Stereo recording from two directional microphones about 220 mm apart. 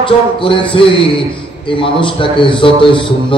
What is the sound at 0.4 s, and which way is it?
A man's voice, 25° left (ahead or behind).